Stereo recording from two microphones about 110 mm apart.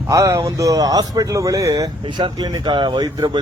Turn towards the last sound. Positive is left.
turn(degrees=-40)  # may be behind; listen again after turning